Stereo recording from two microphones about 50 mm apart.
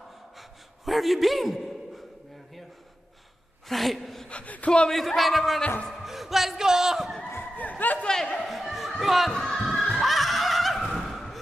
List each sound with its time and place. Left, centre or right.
0.4 s a sound: centre
3.6 s a woman's voice: centre
4.3 s speech: left
4.9 s speech: centre
8.0 s speech: centre
8.4 s a sound: centre
9.0 s speech: centre
9.3 s a sound: centre
9.8 s music: centre